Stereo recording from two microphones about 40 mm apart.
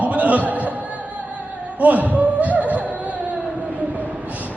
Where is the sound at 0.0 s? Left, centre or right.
Right.